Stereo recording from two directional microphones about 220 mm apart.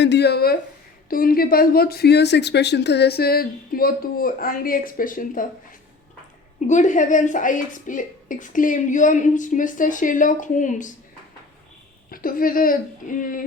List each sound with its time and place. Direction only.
0.0 s speech: 50° left (ahead or behind)
6.7 s a woman's voice: 35° left (ahead or behind)
12.1 s a woman's voice: 40° left (ahead or behind)